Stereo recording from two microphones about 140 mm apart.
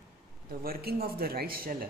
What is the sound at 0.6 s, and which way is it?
Speech, 90° right.